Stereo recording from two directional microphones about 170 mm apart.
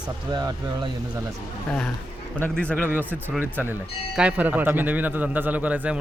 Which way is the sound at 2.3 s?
5° left (ahead or behind).